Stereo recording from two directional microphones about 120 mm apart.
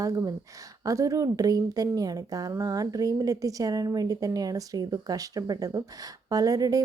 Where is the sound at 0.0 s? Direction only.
30° right (ahead or behind).